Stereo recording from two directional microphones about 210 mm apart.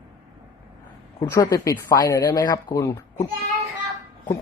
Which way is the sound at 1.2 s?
15° left (ahead or behind).